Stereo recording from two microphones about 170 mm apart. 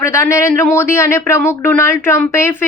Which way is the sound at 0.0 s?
15° left (ahead or behind).